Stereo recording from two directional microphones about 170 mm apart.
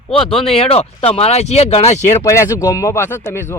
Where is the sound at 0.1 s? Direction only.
35° left (ahead or behind).